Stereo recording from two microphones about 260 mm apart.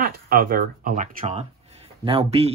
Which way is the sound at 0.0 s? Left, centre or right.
Right.